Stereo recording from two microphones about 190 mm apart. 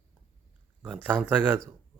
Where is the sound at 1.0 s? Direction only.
10° right (ahead or behind).